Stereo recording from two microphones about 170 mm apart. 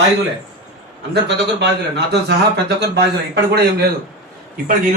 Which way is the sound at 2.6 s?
75° right (ahead or behind).